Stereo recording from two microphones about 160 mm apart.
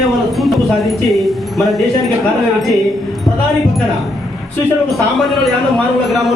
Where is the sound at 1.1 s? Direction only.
Centre (ahead or behind).